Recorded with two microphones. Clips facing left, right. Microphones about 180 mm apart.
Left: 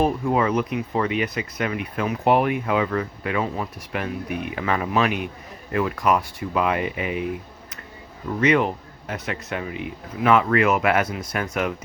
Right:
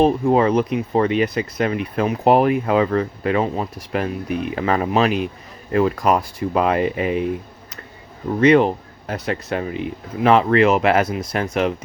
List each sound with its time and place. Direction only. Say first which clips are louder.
0.0 s speech: right 5 dB; 30° right (ahead or behind)
8.4 s speech: right 6 dB; 30° right (ahead or behind)